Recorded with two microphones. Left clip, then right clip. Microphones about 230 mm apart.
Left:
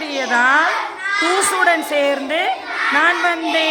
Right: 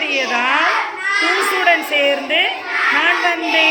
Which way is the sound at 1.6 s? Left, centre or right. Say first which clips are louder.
Right 2 dB; centre.